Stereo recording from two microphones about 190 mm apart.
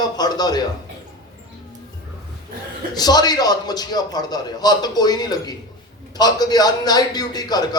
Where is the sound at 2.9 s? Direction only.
20° left (ahead or behind).